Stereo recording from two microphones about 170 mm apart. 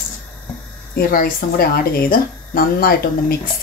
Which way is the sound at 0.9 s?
60° left (ahead or behind).